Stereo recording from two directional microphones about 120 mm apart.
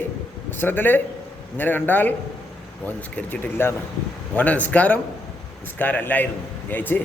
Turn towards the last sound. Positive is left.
turn(degrees=15)  # may be behind; listen again after turning